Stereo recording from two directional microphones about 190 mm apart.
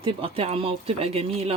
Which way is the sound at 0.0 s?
30° right (ahead or behind).